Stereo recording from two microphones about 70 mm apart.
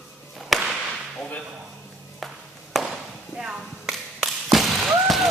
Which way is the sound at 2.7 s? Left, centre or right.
Centre.